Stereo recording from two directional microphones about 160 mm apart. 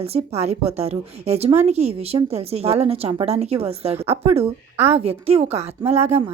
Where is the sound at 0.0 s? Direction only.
40° right (ahead or behind).